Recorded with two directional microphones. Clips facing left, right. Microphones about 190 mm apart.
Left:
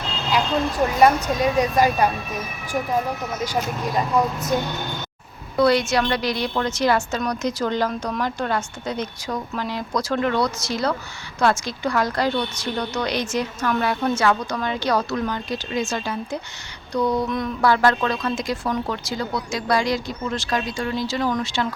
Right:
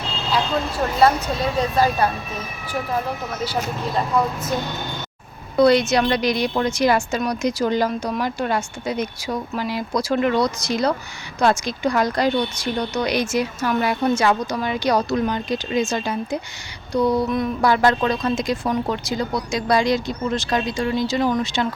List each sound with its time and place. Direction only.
0.9 s speech: 15° left (ahead or behind)
3.4 s speech: 15° left (ahead or behind)
5.5 s a woman's voice: 20° right (ahead or behind); by 17.7 s 5° right (ahead or behind)
17.7 s speech: 20° right (ahead or behind)